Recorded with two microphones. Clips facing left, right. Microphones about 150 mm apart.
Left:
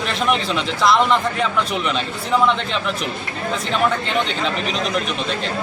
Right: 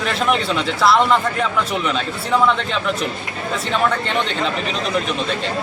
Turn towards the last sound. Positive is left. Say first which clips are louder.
# even
turn(degrees=0)  # may be behind; listen again after turning